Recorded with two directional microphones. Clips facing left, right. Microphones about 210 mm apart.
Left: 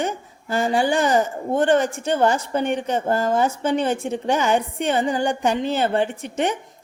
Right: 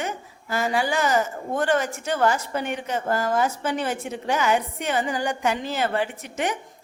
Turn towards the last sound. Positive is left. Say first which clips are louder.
# left 4 dB
turn(degrees=30)  # may be behind; listen again after turning